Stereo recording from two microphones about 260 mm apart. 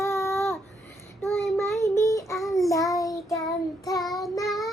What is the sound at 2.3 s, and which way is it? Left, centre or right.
Child singing, centre.